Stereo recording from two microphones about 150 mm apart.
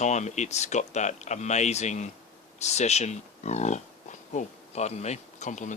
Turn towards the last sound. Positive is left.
turn(degrees=55)  # may be behind; listen again after turning